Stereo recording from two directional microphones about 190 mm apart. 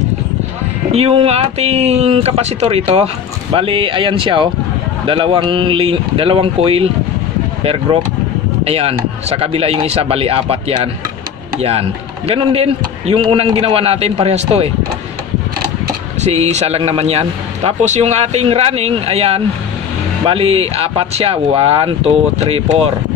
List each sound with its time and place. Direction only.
0.9 s a man's voice: 30° right (ahead or behind)
8.6 s a man's voice: 30° right (ahead or behind)
12.3 s a man's voice: 30° right (ahead or behind)
16.2 s a man's voice: 35° right (ahead or behind)